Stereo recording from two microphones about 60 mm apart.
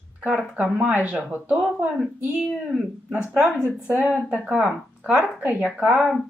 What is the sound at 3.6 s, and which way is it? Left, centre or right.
Speech, right.